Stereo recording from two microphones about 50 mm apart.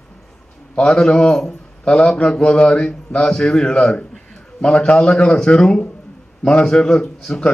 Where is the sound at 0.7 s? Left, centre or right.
Centre.